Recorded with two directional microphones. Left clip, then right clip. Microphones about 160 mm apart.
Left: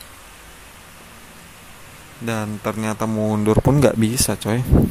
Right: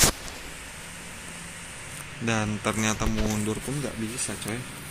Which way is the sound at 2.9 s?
45° left (ahead or behind).